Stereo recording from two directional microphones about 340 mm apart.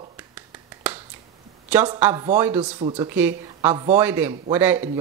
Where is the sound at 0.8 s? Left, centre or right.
Centre.